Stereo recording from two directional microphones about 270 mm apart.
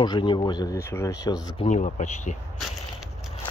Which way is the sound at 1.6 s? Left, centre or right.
Left.